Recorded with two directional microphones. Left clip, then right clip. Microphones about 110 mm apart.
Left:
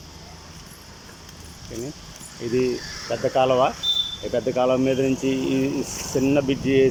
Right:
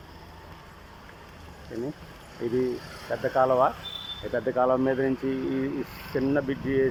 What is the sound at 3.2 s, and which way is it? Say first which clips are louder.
Speech: left 3 dB; 15° left (ahead or behind).